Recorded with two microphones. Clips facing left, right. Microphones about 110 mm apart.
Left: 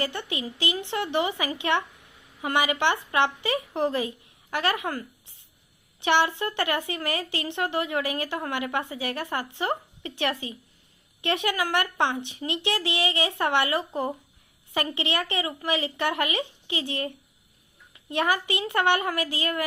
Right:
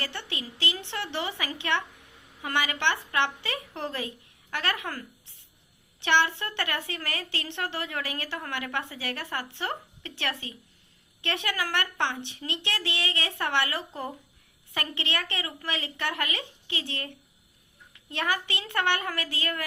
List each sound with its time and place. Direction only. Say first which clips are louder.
0.0 s a woman's voice: left 6 dB; 15° left (ahead or behind)
18.1 s a woman's voice: left 5 dB; 15° left (ahead or behind)